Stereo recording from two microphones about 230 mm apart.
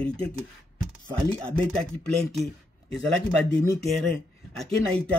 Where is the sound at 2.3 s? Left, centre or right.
Centre.